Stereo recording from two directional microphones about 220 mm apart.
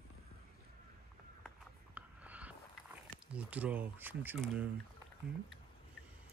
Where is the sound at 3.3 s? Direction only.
5° right (ahead or behind).